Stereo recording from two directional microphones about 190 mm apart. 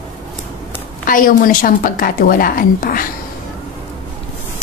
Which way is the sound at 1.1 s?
45° left (ahead or behind).